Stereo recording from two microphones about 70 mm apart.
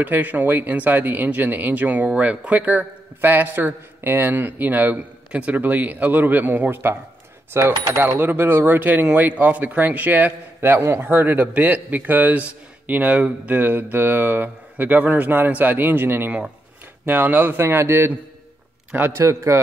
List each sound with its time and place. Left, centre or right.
0.0 s a man's voice: right
19.1 s speech: right